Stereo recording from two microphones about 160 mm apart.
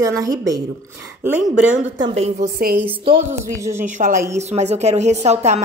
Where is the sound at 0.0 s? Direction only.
20° right (ahead or behind).